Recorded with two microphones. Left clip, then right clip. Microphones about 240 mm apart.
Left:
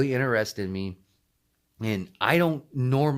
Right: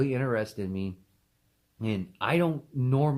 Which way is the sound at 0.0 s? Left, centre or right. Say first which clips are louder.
Left 4 dB; left.